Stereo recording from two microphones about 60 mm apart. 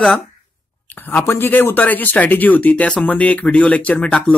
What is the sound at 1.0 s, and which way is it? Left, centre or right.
Speech, left.